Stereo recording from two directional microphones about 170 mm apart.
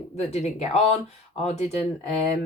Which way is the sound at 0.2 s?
40° left (ahead or behind).